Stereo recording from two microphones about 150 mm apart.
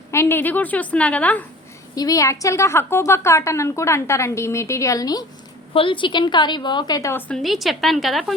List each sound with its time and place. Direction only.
0.1 s a woman's voice: 15° left (ahead or behind)
2.0 s a woman's voice: 25° left (ahead or behind)
5.7 s a woman's voice: 35° left (ahead or behind)
7.1 s a woman's voice: 10° left (ahead or behind)